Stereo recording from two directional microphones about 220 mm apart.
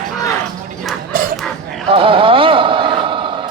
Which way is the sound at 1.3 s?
Centre (ahead or behind).